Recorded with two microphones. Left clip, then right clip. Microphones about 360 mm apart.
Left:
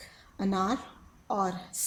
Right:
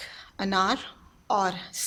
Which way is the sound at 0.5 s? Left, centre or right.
Right.